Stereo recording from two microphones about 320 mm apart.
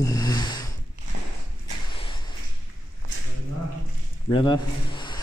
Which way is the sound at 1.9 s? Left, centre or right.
Centre.